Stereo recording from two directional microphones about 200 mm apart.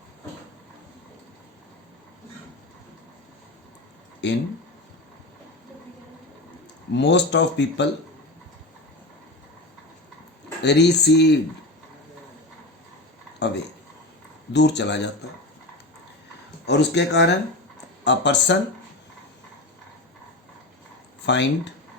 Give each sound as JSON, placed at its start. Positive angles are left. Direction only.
{"t": 4.2, "sound": "speech", "side_deg": 60}
{"t": 6.9, "sound": "speech", "side_deg": 60}
{"t": 10.6, "sound": "speech", "side_deg": 55}
{"t": 13.4, "sound": "speech", "side_deg": 60}
{"t": 16.6, "sound": "speech", "side_deg": 60}
{"t": 21.2, "sound": "speech", "side_deg": 60}